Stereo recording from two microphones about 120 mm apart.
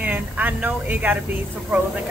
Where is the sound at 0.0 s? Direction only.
10° right (ahead or behind).